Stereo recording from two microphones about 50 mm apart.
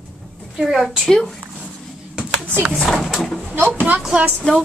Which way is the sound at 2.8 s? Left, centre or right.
Centre.